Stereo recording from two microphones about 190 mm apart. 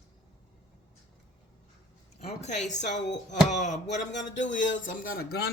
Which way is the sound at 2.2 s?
35° left (ahead or behind).